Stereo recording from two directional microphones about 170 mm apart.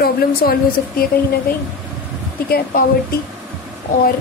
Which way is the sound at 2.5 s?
60° left (ahead or behind).